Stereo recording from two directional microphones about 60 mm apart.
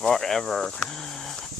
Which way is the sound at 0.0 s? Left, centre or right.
Centre.